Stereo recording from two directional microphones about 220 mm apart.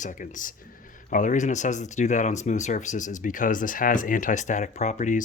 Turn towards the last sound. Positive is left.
turn(degrees=35)  # may be behind; listen again after turning